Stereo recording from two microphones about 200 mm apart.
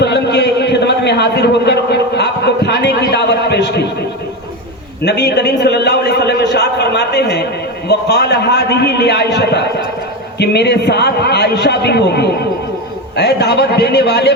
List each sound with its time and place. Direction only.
0.0 s a sound: 60° left (ahead or behind)
3.1 s a man's voice: 60° left (ahead or behind)
5.0 s a man's voice: 55° left (ahead or behind)